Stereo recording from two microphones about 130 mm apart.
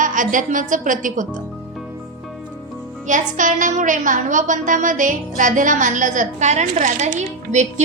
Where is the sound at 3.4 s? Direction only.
80° right.